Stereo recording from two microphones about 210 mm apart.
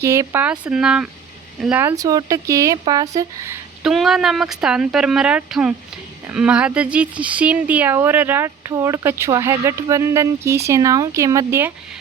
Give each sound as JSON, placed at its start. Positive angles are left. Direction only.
{"t": 0.0, "sound": "speech", "side_deg": -15}
{"t": 3.8, "sound": "speech", "side_deg": 0}